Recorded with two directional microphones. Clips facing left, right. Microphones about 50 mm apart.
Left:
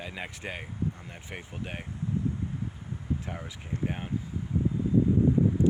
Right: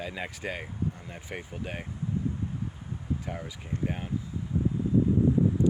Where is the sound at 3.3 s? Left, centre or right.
Centre.